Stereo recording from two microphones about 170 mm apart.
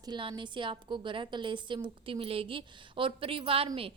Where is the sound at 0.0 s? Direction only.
25° right (ahead or behind).